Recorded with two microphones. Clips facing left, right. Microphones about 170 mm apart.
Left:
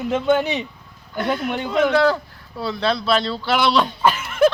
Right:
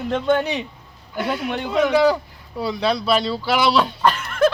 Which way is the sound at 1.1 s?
5° right (ahead or behind).